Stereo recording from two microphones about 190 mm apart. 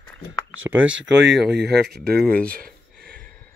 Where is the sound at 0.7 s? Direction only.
5° right (ahead or behind).